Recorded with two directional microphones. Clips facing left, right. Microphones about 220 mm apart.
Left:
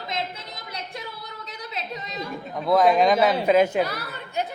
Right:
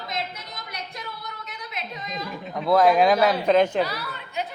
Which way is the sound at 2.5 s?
Centre (ahead or behind).